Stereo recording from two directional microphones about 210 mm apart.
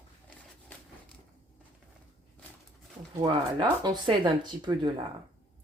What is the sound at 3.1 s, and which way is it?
Speech, 20° right (ahead or behind).